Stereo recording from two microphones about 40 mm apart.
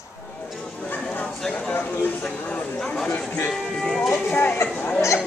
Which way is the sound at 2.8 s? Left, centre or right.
Centre.